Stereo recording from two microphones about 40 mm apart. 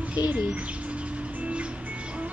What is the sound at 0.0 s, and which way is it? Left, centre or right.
Bird, right.